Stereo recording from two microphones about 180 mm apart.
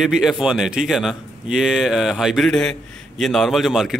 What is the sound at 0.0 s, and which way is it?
A man's voice, centre (ahead or behind).